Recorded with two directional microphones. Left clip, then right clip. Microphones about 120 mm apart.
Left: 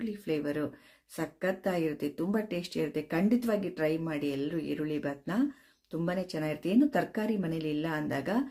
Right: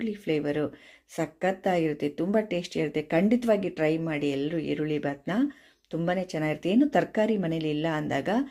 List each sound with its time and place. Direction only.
0.0 s speech: 20° right (ahead or behind)